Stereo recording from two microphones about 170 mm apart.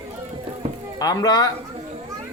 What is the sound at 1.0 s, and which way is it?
Speech, 20° left (ahead or behind).